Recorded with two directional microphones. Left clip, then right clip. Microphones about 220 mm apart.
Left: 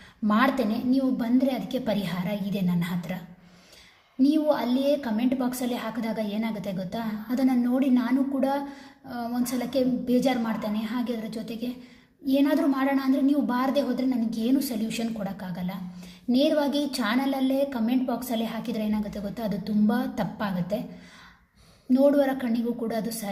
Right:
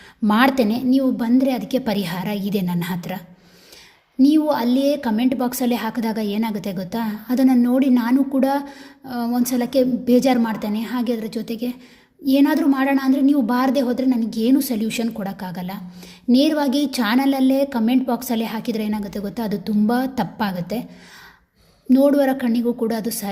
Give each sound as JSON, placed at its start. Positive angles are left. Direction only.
{"t": 0.3, "sound": "a woman's voice", "side_deg": -45}
{"t": 4.2, "sound": "a woman's voice", "side_deg": -45}
{"t": 21.9, "sound": "a woman's voice", "side_deg": -45}